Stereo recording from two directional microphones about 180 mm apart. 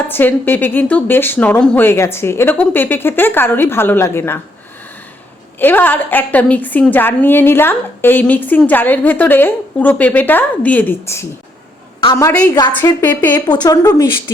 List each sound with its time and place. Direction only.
0.1 s a woman's voice: 10° left (ahead or behind)
5.5 s a woman's voice: 10° left (ahead or behind)
12.5 s a woman's voice: 25° left (ahead or behind)